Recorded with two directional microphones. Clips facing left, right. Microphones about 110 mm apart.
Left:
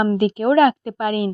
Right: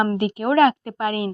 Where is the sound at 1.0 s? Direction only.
30° right (ahead or behind).